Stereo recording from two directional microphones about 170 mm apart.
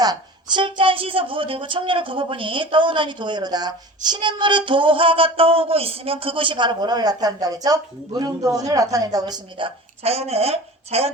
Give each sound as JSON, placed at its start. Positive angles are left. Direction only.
{"t": 0.0, "sound": "a woman's voice", "side_deg": -25}